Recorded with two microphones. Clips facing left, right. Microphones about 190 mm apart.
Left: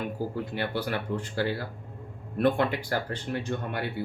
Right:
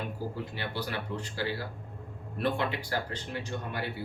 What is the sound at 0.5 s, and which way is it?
Speech, 55° left (ahead or behind).